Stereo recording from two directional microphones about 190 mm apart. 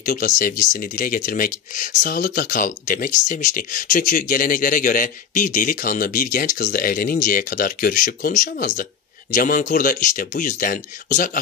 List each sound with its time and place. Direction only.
0.0 s speech: 45° left (ahead or behind)